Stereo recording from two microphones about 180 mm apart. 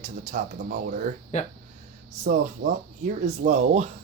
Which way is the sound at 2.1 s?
45° right (ahead or behind).